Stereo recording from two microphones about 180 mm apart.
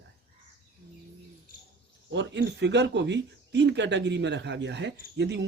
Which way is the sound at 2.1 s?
85° right.